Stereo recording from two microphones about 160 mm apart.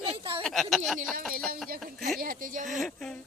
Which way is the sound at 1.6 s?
65° right (ahead or behind).